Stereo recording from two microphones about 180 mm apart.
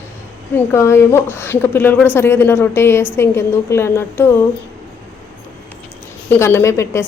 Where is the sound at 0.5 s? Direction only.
15° left (ahead or behind).